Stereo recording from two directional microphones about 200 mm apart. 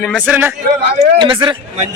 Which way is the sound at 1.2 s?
25° right (ahead or behind).